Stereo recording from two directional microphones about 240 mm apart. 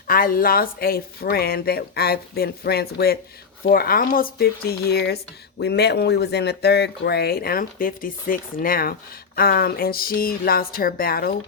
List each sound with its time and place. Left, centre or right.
0.1 s speech: left